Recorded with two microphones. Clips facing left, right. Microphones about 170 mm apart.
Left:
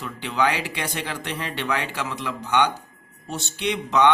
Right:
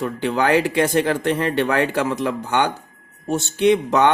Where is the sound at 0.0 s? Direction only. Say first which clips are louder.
Right 4 dB; 50° right (ahead or behind).